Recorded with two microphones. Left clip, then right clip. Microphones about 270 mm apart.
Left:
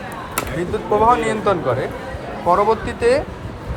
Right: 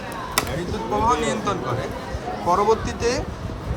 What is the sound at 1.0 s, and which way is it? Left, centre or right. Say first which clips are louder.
Speech: left 6 dB; centre.